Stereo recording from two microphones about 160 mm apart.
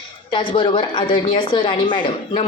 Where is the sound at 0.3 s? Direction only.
30° left (ahead or behind).